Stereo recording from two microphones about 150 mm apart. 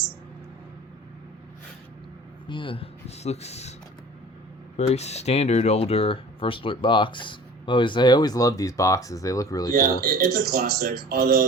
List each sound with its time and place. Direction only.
2.5 s speech: 35° left (ahead or behind)
4.8 s speech: 45° left (ahead or behind); by 9.7 s 25° left (ahead or behind)
9.7 s speech: 80° right